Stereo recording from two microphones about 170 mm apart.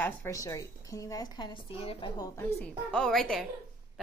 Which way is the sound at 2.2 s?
15° left (ahead or behind).